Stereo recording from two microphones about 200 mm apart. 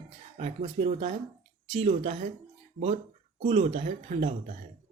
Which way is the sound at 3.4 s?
30° right (ahead or behind).